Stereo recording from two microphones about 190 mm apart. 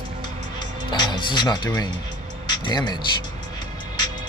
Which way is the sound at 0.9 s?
20° left (ahead or behind).